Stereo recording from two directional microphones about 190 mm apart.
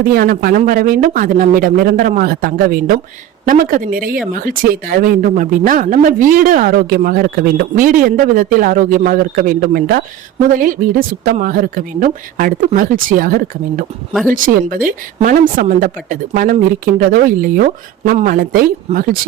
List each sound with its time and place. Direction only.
0.0 s speech: 50° right (ahead or behind)
14.1 s speech: centre (ahead or behind)
14.3 s speech: 45° right (ahead or behind)